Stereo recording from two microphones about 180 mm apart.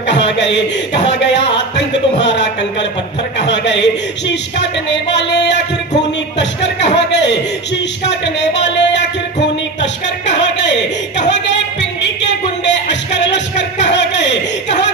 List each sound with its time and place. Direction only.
0.0 s speech: 75° left (ahead or behind)
3.5 s speech: 75° left (ahead or behind)
9.8 s a sound: 75° left (ahead or behind)